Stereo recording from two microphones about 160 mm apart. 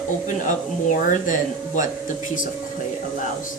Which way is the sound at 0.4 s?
50° left (ahead or behind).